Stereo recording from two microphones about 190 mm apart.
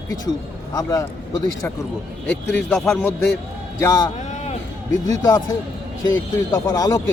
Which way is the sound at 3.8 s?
20° left (ahead or behind).